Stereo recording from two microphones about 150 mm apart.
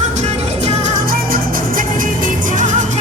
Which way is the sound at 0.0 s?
50° right (ahead or behind).